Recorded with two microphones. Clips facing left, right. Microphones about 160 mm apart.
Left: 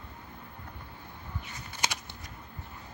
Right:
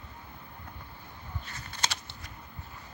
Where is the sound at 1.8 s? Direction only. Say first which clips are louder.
Left 1 dB; 15° left (ahead or behind).